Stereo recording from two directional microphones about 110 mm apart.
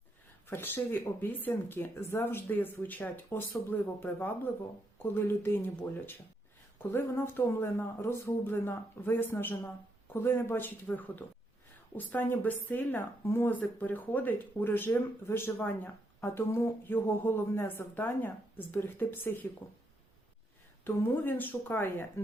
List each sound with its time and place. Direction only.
0.4 s a woman's voice: 20° left (ahead or behind)
6.8 s a woman's voice: 20° left (ahead or behind)
20.8 s speech: 20° left (ahead or behind)